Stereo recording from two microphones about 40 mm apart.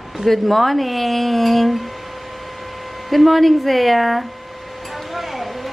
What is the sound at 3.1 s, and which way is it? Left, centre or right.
Speech, centre.